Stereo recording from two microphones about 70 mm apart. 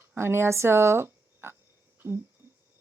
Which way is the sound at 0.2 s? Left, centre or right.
Right.